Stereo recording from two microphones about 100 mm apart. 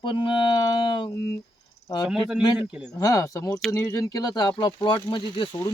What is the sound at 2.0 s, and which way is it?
Speech, 5° right (ahead or behind).